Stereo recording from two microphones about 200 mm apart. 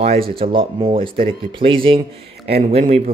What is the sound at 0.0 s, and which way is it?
Speech, 30° right (ahead or behind).